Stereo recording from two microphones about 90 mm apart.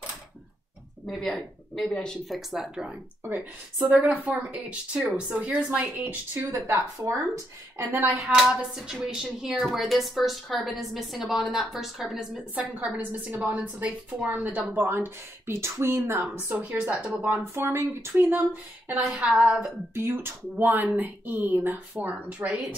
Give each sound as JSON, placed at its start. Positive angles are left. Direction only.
{"t": 1.1, "sound": "a woman's voice", "side_deg": 5}
{"t": 3.8, "sound": "speech", "side_deg": -10}
{"t": 6.7, "sound": "speech", "side_deg": -35}
{"t": 7.8, "sound": "a woman's voice", "side_deg": -20}
{"t": 12.9, "sound": "speech", "side_deg": -15}
{"t": 16.4, "sound": "speech", "side_deg": -15}
{"t": 17.2, "sound": "speech", "side_deg": -25}
{"t": 19.9, "sound": "speech", "side_deg": -30}